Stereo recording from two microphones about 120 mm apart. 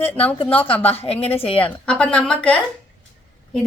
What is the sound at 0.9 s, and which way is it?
Speech, 55° left (ahead or behind).